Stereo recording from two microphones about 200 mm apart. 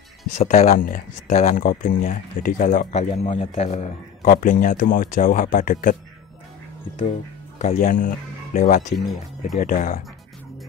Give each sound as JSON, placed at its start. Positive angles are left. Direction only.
{"t": 0.4, "sound": "speech", "side_deg": 35}
{"t": 7.5, "sound": "speech", "side_deg": 35}
{"t": 8.9, "sound": "speech", "side_deg": 0}
{"t": 9.6, "sound": "speech", "side_deg": 40}